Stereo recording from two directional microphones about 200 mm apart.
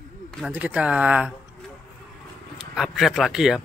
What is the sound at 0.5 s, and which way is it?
Speech, 5° right (ahead or behind).